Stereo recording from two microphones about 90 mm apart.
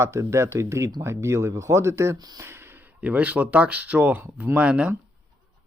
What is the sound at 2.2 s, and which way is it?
Speech, 45° right (ahead or behind).